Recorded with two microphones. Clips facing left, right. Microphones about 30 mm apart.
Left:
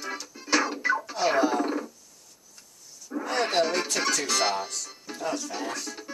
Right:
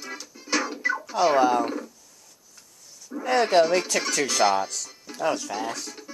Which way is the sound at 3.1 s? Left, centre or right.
Centre.